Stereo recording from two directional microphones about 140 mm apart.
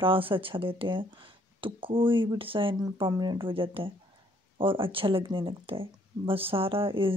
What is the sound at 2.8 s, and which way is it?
A woman's voice, 30° right (ahead or behind).